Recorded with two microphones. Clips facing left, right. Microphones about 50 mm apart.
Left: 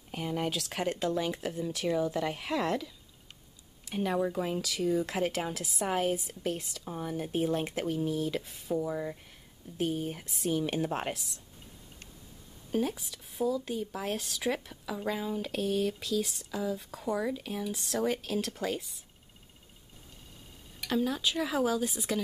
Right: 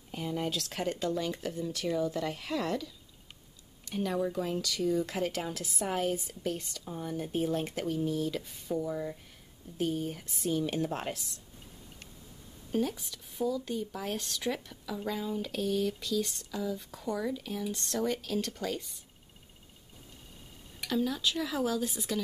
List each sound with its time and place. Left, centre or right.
0.1 s speech: left
0.5 s speech: centre
3.9 s speech: centre
12.7 s speech: centre
15.9 s speech: centre
17.6 s speech: centre
18.0 s speech: centre
20.9 s speech: centre